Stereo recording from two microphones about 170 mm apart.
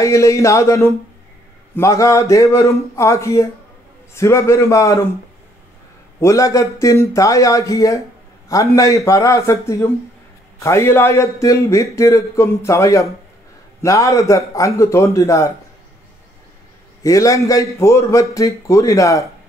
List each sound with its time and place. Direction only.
0.0 s a man's voice: 20° left (ahead or behind)
6.1 s a man's voice: 20° left (ahead or behind)
17.0 s a man's voice: 20° left (ahead or behind)